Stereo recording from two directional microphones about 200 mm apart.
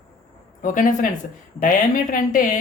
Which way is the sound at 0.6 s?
40° left (ahead or behind).